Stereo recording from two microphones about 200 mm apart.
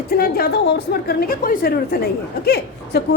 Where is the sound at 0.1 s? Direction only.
50° left (ahead or behind).